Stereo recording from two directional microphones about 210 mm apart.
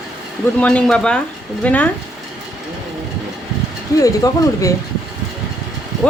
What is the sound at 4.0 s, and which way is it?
Speech, 15° left (ahead or behind).